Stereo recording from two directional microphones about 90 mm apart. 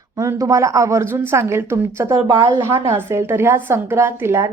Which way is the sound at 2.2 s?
50° right (ahead or behind).